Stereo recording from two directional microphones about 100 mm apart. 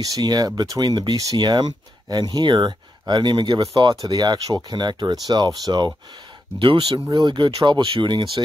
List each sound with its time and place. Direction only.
0.0 s speech: 40° right (ahead or behind)
6.6 s speech: 60° right (ahead or behind)
6.9 s speech: 45° right (ahead or behind)